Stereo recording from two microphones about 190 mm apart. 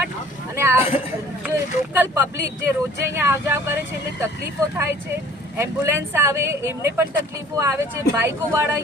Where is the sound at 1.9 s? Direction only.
10° right (ahead or behind).